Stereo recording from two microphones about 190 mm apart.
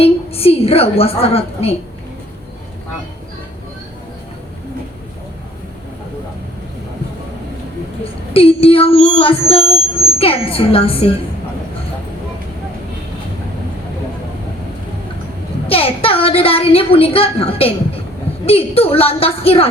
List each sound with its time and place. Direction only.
0.0 s a woman's voice: 30° left (ahead or behind)
8.3 s a woman's voice: 30° left (ahead or behind)
15.6 s a woman's voice: 30° left (ahead or behind)